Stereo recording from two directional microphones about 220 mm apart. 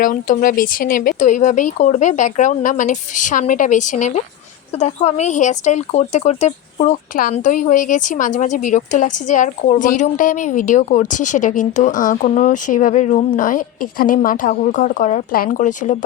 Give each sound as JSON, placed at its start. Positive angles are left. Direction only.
{"t": 0.0, "sound": "speech", "side_deg": 40}